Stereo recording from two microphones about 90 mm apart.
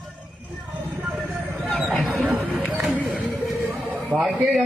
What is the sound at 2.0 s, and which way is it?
Mouse, 20° right (ahead or behind).